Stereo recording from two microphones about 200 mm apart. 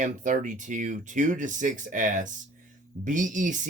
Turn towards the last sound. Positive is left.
turn(degrees=-40)  # may be behind; listen again after turning